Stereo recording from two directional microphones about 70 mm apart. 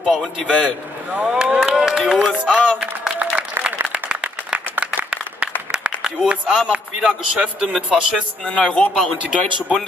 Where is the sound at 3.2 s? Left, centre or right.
Right.